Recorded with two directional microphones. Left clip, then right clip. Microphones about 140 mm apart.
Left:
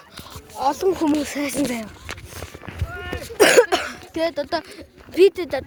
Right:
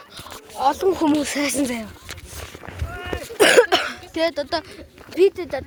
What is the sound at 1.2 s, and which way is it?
Speech, 10° left (ahead or behind).